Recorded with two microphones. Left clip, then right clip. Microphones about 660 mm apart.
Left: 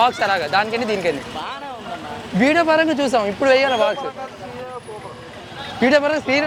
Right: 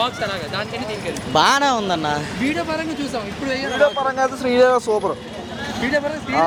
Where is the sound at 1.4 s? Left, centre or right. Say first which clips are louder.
Right 14 dB; right.